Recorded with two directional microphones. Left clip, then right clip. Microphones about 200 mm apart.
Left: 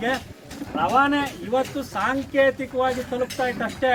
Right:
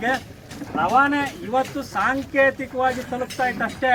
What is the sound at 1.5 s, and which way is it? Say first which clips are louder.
Speech: right 2 dB; 15° left (ahead or behind).